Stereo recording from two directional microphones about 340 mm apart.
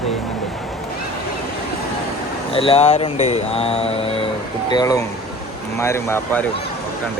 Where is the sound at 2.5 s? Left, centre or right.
Centre.